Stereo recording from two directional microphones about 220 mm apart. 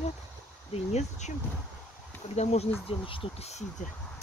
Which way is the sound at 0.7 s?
30° left (ahead or behind).